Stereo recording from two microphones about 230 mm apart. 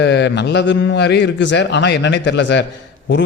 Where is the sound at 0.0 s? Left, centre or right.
Left.